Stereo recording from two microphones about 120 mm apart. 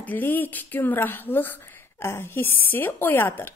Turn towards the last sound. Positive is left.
turn(degrees=15)  # may be behind; listen again after turning